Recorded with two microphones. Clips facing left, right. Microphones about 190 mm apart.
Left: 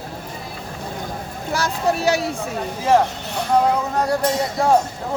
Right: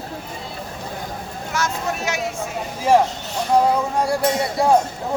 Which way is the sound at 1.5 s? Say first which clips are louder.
Left 4 dB; 35° left (ahead or behind).